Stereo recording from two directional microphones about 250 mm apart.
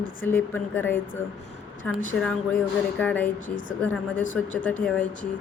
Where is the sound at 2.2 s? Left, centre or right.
Centre.